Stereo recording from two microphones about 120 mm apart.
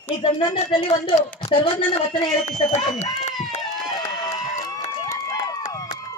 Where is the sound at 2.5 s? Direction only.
75° left (ahead or behind).